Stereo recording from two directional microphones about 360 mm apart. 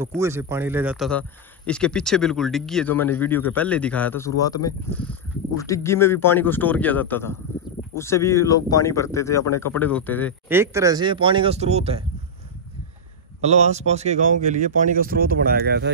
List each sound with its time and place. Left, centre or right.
0.0 s speech: centre
10.5 s speech: centre
13.4 s speech: centre